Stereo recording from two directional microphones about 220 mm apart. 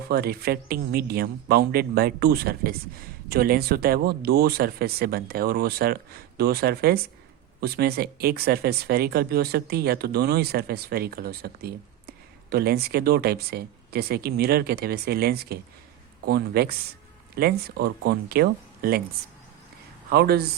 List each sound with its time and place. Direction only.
0.1 s speech: 45° right (ahead or behind)
20.1 s speech: 45° right (ahead or behind)